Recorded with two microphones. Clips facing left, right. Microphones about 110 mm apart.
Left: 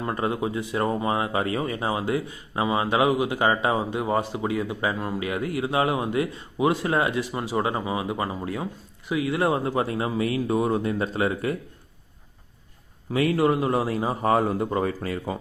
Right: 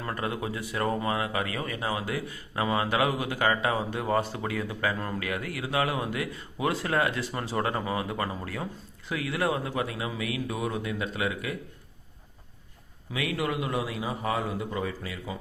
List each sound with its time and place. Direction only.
0.0 s speech: 25° left (ahead or behind)
13.1 s a man's voice: 40° left (ahead or behind)